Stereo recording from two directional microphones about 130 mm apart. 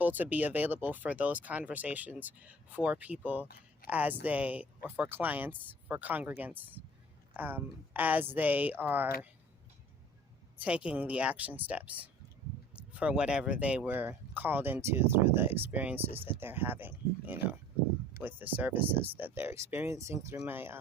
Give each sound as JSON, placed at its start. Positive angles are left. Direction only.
{"t": 0.0, "sound": "speech", "side_deg": -15}
{"t": 10.6, "sound": "speech", "side_deg": -10}